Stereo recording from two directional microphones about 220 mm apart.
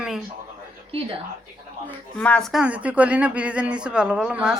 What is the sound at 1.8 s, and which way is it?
Speech, 5° left (ahead or behind).